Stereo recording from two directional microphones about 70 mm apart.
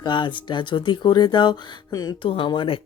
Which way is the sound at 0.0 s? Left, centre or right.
Left.